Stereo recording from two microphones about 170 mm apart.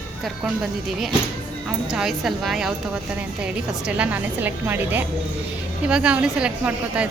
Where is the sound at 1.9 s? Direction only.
Centre (ahead or behind).